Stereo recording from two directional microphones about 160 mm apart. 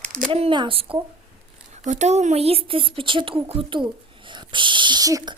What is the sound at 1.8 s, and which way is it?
Speech, 45° right (ahead or behind).